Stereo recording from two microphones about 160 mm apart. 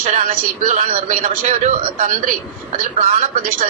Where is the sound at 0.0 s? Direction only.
55° right (ahead or behind).